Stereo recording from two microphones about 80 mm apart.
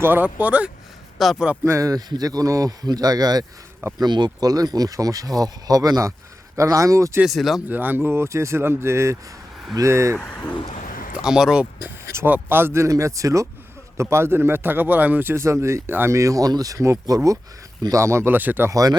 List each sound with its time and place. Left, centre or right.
0.0 s a man's voice: right
1.2 s speech: centre
1.6 s speech: right
7.3 s speech: centre
7.7 s speech: right
10.2 s speech: centre
11.1 s speech: centre
11.8 s a man's voice: right
16.1 s speech: right
18.7 s speech: right